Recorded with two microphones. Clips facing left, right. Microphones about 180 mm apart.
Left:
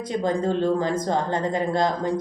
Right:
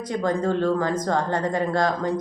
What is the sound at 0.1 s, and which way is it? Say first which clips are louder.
Speech: even; 20° left (ahead or behind).